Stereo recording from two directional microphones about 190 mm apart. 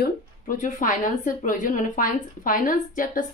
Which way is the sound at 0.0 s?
45° left (ahead or behind).